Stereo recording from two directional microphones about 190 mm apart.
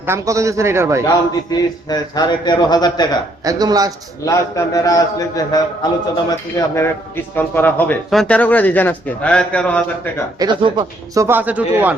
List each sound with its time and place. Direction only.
0.0 s a man's voice: 15° right (ahead or behind)
1.0 s a man's voice: 20° left (ahead or behind)
3.4 s speech: 20° right (ahead or behind)
4.3 s speech: 15° left (ahead or behind)
10.3 s a man's voice: 25° right (ahead or behind); by 11.9 s 10° right (ahead or behind)